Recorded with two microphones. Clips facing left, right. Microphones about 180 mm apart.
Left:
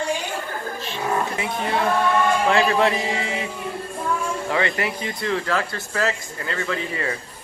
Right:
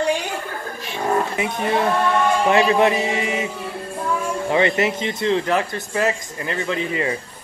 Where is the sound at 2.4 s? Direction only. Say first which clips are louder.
Right 5 dB; 20° right (ahead or behind).